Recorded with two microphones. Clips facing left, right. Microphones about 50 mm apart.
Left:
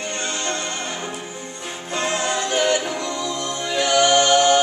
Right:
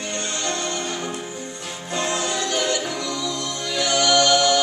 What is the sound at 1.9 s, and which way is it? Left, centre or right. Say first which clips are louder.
A capella: left 2 dB; left.